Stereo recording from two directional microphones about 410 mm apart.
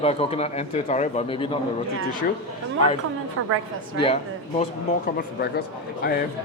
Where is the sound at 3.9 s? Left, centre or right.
Centre.